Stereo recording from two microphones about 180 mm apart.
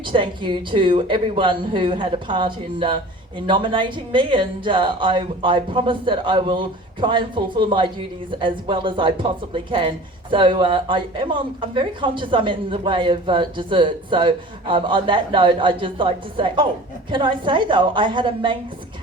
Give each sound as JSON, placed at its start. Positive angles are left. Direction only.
{"t": 0.1, "sound": "speech", "side_deg": -25}